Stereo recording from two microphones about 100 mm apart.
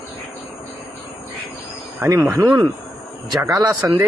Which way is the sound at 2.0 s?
25° right (ahead or behind).